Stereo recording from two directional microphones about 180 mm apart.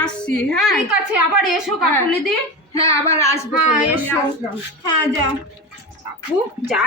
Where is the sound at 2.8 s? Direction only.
15° left (ahead or behind).